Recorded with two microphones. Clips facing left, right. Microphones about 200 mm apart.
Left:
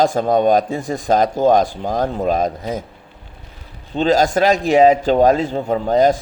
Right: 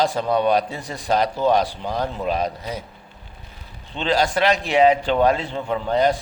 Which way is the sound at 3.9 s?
45° left (ahead or behind).